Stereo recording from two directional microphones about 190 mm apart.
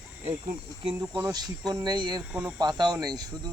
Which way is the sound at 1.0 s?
10° right (ahead or behind).